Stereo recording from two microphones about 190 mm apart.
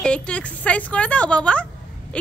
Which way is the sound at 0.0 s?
5° left (ahead or behind).